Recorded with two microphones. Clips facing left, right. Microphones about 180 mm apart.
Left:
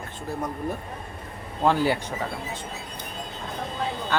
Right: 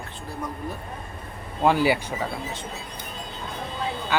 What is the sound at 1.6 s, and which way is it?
Speech, 10° right (ahead or behind).